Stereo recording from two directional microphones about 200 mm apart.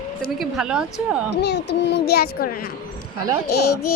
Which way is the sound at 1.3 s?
60° left (ahead or behind).